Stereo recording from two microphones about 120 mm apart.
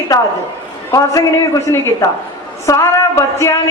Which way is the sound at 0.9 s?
30° left (ahead or behind).